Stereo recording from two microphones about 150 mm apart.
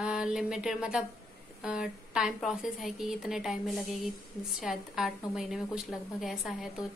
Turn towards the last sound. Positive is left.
turn(degrees=0)  # may be behind; listen again after turning